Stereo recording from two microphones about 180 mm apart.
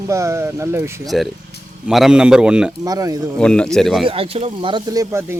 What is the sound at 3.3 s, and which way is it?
Speech, 5° left (ahead or behind).